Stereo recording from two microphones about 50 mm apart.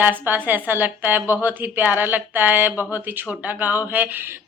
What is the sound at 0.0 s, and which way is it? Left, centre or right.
A woman's voice, right.